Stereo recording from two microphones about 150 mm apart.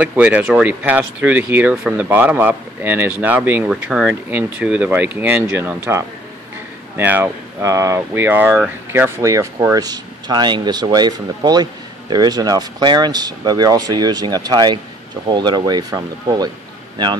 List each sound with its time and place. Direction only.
0.0 s speech: 10° right (ahead or behind); by 16.4 s 25° right (ahead or behind)